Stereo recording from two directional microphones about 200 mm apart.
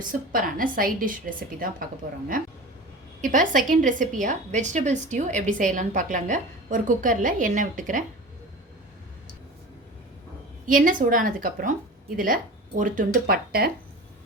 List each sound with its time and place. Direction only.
0.1 s a woman's voice: 45° right (ahead or behind)
10.7 s a woman's voice: 45° right (ahead or behind)